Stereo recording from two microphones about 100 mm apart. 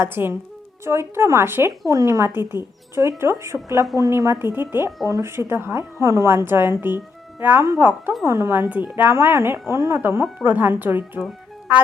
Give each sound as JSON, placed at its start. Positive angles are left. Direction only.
{"t": 0.0, "sound": "a woman's voice", "side_deg": -20}